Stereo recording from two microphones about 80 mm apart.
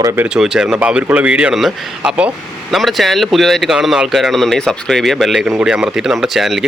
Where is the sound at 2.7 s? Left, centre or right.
Centre.